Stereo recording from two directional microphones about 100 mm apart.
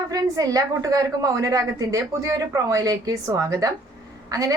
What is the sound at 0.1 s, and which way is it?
A woman's voice, 40° right (ahead or behind).